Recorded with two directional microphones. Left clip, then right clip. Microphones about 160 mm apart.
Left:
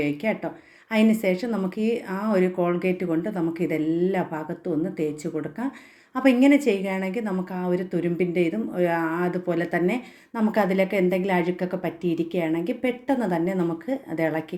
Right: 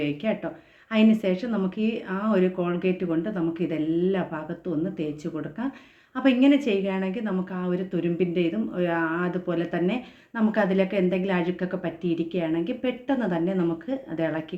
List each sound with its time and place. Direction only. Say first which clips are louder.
0.0 s speech: left 2 dB; 25° left (ahead or behind)